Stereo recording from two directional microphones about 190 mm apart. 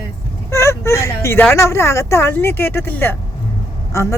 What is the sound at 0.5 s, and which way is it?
Speech, 15° left (ahead or behind).